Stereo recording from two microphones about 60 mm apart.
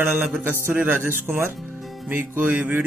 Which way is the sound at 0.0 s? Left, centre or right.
Right.